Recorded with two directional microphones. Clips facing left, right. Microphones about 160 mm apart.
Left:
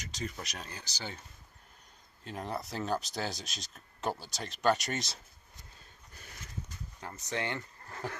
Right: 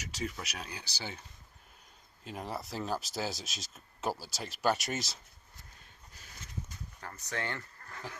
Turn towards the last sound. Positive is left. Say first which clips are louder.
# left 2 dB
turn(degrees=20)  # may be behind; listen again after turning